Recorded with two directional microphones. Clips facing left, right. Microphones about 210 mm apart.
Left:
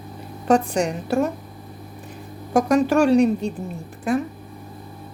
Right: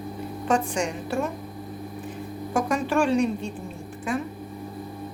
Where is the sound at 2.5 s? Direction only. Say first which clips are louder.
Left 7 dB; 40° left (ahead or behind).